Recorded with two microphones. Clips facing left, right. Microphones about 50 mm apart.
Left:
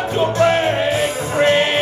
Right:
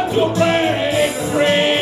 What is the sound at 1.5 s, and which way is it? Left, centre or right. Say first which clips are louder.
Music: even; right.